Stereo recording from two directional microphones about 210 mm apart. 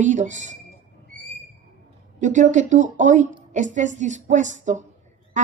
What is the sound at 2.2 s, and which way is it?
Speech, 35° right (ahead or behind).